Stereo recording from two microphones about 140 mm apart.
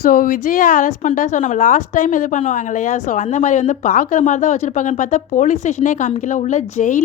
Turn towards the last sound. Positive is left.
turn(degrees=65)  # may be behind; listen again after turning